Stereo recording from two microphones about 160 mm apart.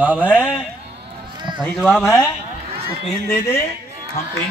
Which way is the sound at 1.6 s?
Centre (ahead or behind).